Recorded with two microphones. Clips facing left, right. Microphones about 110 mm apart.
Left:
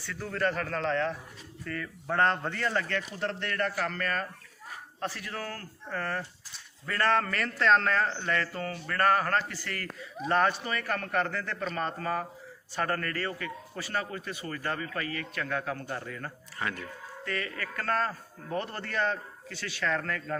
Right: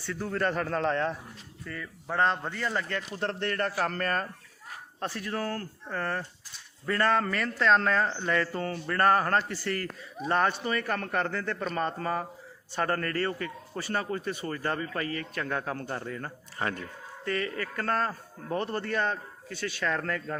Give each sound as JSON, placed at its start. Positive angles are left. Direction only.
{"t": 0.0, "sound": "speech", "side_deg": -25}
{"t": 1.6, "sound": "speech", "side_deg": -10}
{"t": 3.2, "sound": "a man's voice", "side_deg": -35}
{"t": 7.4, "sound": "speech", "side_deg": -5}
{"t": 7.9, "sound": "speech", "side_deg": -20}
{"t": 8.6, "sound": "a man's voice", "side_deg": -30}